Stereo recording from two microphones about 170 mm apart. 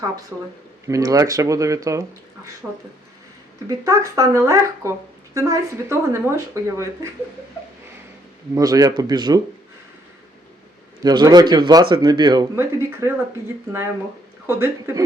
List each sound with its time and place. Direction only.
0.3 s speech: 10° right (ahead or behind)
0.9 s speech: 20° right (ahead or behind)
3.7 s speech: 20° right (ahead or behind)
8.5 s speech: 20° right (ahead or behind)
11.0 s speech: 25° right (ahead or behind)
12.5 s speech: 15° right (ahead or behind)
14.4 s speech: 15° right (ahead or behind)